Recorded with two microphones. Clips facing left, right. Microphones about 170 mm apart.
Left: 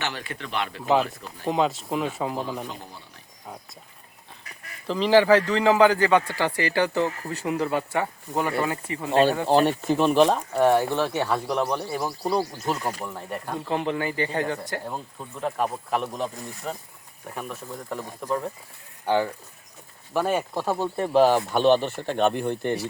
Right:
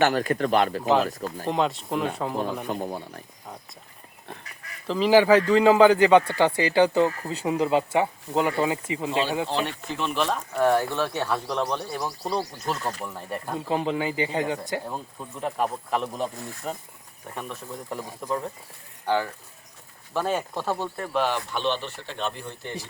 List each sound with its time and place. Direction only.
0.0 s speech: 45° right (ahead or behind)
1.5 s speech: centre (ahead or behind)
2.6 s speech: 55° right (ahead or behind)
4.9 s speech: 5° right (ahead or behind)
9.5 s speech: 45° left (ahead or behind)
10.6 s speech: 15° left (ahead or behind); by 13.6 s centre (ahead or behind)
13.7 s speech: 10° right (ahead or behind)
14.8 s speech: centre (ahead or behind)
19.0 s speech: 15° left (ahead or behind)
21.0 s speech: 35° left (ahead or behind); by 22.7 s 55° left (ahead or behind)